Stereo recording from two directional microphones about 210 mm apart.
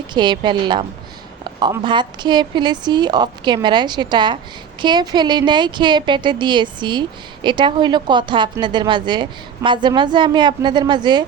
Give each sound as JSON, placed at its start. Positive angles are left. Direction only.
{"t": 0.1, "sound": "a woman's voice", "side_deg": -20}